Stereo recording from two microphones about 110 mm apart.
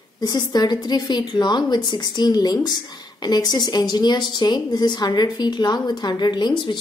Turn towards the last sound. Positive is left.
turn(degrees=45)  # may be behind; listen again after turning